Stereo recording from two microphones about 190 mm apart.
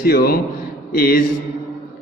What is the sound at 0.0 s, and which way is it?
A man's voice, 50° left (ahead or behind).